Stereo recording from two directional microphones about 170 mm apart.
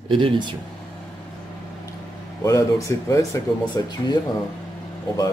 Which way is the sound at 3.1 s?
20° left (ahead or behind).